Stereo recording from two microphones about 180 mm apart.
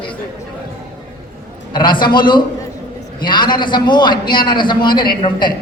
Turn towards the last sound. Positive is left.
turn(degrees=25)  # may be behind; listen again after turning